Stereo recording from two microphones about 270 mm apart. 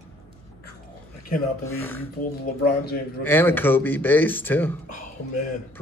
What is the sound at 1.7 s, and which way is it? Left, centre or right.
Speech, centre.